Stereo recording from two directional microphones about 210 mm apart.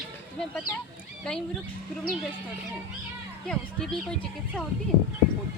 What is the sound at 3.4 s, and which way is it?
Speech, 5° left (ahead or behind).